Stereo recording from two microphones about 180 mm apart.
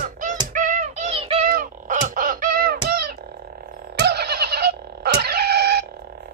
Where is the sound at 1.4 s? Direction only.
50° right (ahead or behind).